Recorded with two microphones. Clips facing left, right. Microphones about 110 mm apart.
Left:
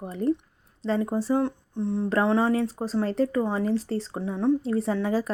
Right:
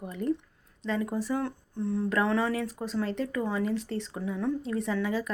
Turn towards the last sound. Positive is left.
turn(degrees=35)  # may be behind; listen again after turning